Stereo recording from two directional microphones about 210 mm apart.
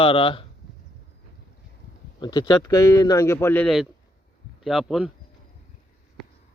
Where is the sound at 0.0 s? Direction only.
25° left (ahead or behind).